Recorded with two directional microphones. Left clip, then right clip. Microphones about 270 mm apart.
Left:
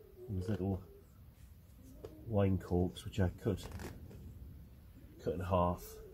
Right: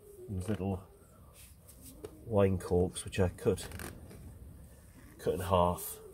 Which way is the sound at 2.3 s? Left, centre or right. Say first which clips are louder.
Right 6 dB; right.